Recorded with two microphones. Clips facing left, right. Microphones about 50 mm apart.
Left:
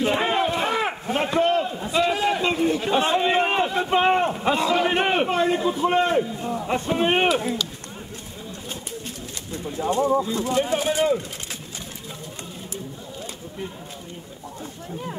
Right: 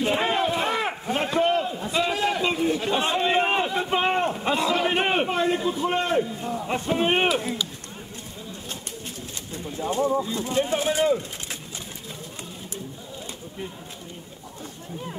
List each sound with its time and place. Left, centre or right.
0.0 s a sound: centre
3.1 s a man's voice: centre
9.6 s bird: left
10.2 s speech: left